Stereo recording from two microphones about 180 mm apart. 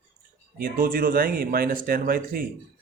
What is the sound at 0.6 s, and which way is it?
Speech, 50° right (ahead or behind).